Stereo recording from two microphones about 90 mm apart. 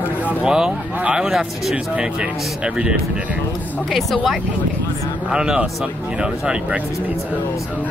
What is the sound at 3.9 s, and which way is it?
Speech, centre (ahead or behind).